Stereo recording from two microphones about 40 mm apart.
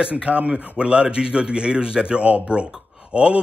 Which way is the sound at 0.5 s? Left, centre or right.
Right.